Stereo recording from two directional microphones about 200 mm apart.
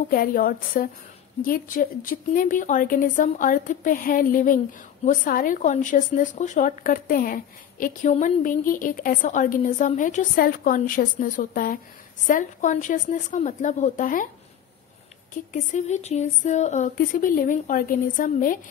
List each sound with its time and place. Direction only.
0.1 s a woman's voice: 45° left (ahead or behind)
15.5 s speech: 35° left (ahead or behind)